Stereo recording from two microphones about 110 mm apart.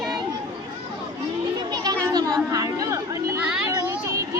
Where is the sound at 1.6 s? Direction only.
40° right (ahead or behind).